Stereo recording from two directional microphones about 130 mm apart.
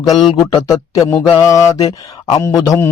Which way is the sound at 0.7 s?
25° left (ahead or behind).